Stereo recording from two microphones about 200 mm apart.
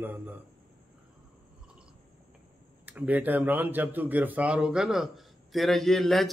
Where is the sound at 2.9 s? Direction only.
10° right (ahead or behind).